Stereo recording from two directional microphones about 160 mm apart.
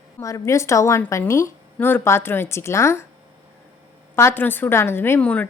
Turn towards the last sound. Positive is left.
turn(degrees=10)  # may be behind; listen again after turning